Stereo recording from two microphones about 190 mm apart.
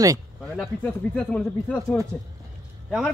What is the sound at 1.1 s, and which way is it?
Speech, 5° left (ahead or behind).